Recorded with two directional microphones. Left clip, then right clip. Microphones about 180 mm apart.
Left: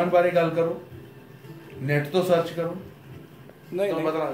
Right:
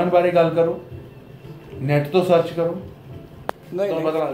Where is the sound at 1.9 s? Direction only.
25° left (ahead or behind).